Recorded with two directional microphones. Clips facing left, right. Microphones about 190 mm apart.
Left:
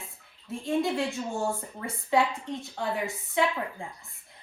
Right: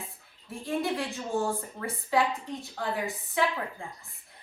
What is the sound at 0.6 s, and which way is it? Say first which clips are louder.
Speech: left 3 dB; 20° left (ahead or behind).